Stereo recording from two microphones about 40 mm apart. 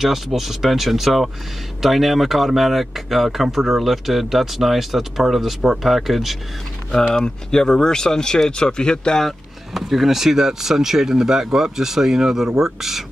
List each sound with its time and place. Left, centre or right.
0.0 s speech: centre
7.5 s speech: centre
9.8 s speech: centre